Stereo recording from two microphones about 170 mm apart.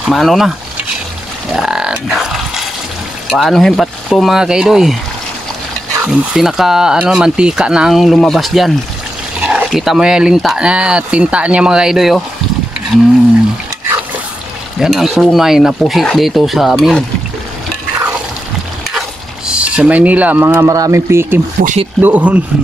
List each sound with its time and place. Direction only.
0.0 s speech: centre (ahead or behind)
6.0 s speech: centre (ahead or behind)
14.8 s speech: centre (ahead or behind)
18.9 s speech: 5° right (ahead or behind)
21.5 s speech: 50° right (ahead or behind)
22.0 s speech: 10° right (ahead or behind)